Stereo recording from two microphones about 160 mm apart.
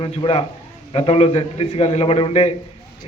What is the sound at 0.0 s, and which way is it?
A man's voice, 35° left (ahead or behind).